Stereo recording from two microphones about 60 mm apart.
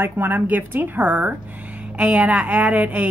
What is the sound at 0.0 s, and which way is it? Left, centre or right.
A woman's voice, right.